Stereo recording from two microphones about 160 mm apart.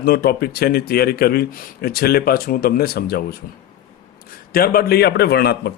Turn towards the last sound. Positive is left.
turn(degrees=85)